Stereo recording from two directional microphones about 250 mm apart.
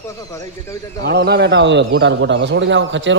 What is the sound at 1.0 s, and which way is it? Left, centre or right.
Speech, right.